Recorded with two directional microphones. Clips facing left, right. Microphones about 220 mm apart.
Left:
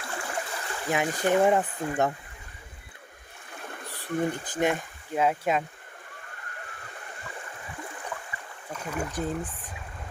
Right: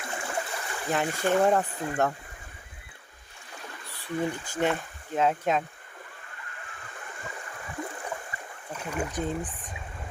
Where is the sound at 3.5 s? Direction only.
55° left (ahead or behind).